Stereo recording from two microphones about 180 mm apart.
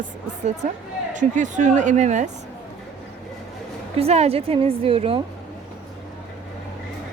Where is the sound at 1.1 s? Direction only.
45° right (ahead or behind).